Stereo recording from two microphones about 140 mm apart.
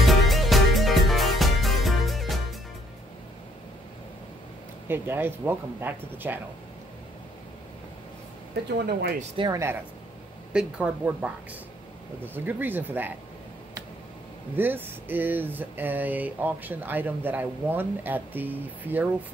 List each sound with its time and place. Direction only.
0.0 s music: centre (ahead or behind)
4.8 s speech: 15° right (ahead or behind)
9.5 s speech: 20° right (ahead or behind)
10.5 s speech: 10° right (ahead or behind)
14.5 s speech: 15° right (ahead or behind)